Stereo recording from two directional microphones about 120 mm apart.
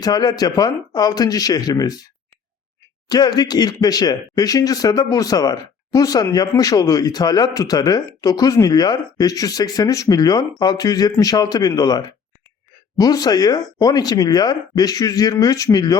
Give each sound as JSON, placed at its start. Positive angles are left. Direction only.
{"t": 0.0, "sound": "a man's voice", "side_deg": 35}
{"t": 3.1, "sound": "a man's voice", "side_deg": 35}